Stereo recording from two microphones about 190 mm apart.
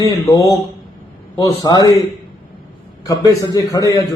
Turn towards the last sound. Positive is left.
turn(degrees=20)  # may be behind; listen again after turning